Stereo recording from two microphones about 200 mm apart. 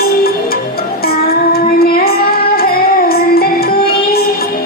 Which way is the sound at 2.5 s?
50° left (ahead or behind).